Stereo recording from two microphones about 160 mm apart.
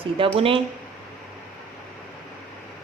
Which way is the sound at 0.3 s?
35° right (ahead or behind).